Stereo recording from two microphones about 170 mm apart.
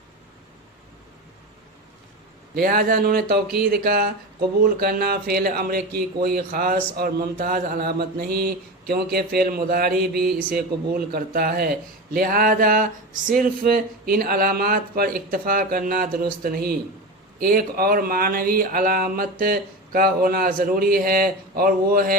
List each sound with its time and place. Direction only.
2.6 s speech: 60° right (ahead or behind)